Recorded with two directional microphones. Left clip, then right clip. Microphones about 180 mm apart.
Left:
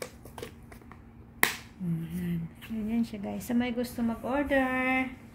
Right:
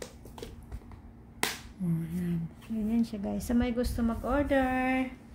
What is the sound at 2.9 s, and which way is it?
A woman's voice, 20° right (ahead or behind).